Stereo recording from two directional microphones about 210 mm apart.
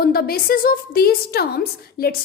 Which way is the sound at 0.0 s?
45° left (ahead or behind).